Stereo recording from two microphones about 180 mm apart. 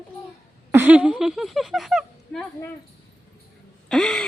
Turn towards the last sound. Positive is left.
turn(degrees=5)  # may be behind; listen again after turning